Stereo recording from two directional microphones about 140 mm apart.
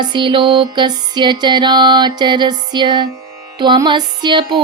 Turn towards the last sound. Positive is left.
turn(degrees=-35)  # may be behind; listen again after turning